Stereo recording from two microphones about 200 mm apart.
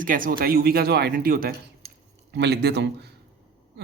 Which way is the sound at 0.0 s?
45° right (ahead or behind).